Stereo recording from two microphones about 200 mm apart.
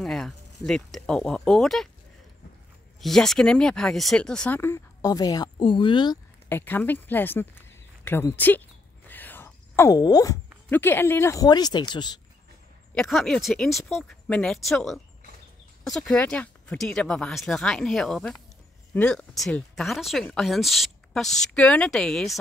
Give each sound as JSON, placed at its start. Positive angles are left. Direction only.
{"t": 0.0, "sound": "speech", "side_deg": 0}
{"t": 3.0, "sound": "speech", "side_deg": 0}
{"t": 6.5, "sound": "a sound", "side_deg": 10}
{"t": 10.7, "sound": "speech", "side_deg": 10}
{"t": 12.9, "sound": "speech", "side_deg": 0}